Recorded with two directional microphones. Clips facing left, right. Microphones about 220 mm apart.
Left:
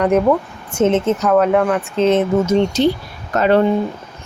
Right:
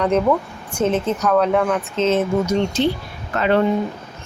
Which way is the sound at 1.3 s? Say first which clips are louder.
Left 2 dB; centre (ahead or behind).